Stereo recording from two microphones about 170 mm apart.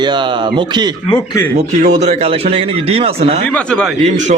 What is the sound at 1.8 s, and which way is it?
Speech, 45° right (ahead or behind).